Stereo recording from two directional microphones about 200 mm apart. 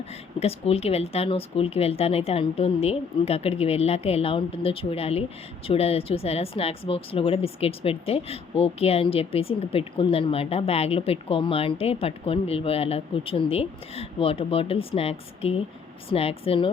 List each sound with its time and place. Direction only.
0.3 s speech: 30° left (ahead or behind)